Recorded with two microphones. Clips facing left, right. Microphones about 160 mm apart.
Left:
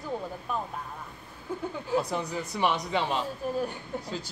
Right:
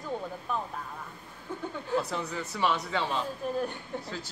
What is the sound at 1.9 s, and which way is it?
Speech, 15° left (ahead or behind).